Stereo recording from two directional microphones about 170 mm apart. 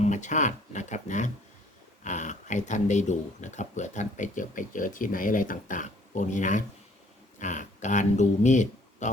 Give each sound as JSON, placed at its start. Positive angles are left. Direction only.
{"t": 0.0, "sound": "speech", "side_deg": 45}